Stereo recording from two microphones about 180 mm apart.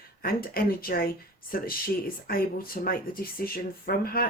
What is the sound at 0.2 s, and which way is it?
Speech, 55° left (ahead or behind).